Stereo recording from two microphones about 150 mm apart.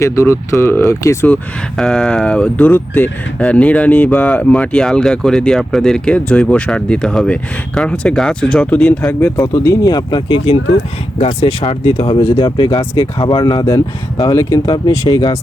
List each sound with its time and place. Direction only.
0.0 s speech: 20° left (ahead or behind)
1.7 s speech: 5° left (ahead or behind)
9.4 s speech: 25° left (ahead or behind)